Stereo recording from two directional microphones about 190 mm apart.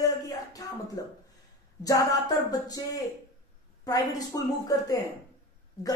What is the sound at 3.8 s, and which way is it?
Speech, 20° left (ahead or behind).